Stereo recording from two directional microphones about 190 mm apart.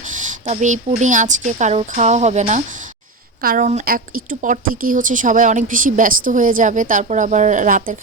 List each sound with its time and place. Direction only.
0.0 s a woman's voice: 40° right (ahead or behind)